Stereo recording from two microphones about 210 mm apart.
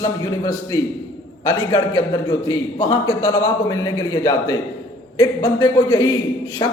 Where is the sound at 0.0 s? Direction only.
15° left (ahead or behind).